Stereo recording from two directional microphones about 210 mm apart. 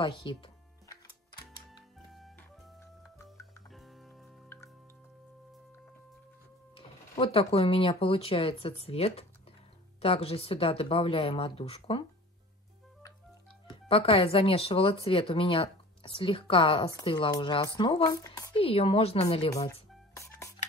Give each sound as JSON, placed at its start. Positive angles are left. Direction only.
{"t": 0.0, "sound": "music", "side_deg": 25}
{"t": 2.0, "sound": "music", "side_deg": 0}
{"t": 3.7, "sound": "music", "side_deg": 0}
{"t": 6.7, "sound": "speech", "side_deg": 25}
{"t": 13.7, "sound": "speech", "side_deg": 25}
{"t": 20.2, "sound": "music", "side_deg": 15}